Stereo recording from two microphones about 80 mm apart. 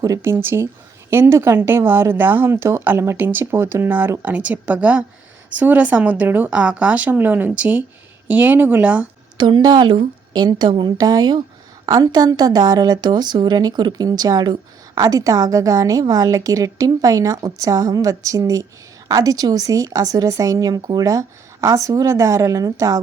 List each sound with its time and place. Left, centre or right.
0.2 s speech: right
9.6 s speech: right
15.0 s speech: right